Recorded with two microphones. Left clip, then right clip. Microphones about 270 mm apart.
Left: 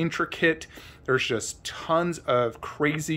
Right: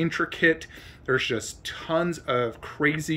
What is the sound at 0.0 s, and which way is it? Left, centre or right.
Speech, centre.